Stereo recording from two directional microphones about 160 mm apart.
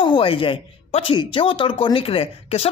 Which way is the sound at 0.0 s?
30° left (ahead or behind).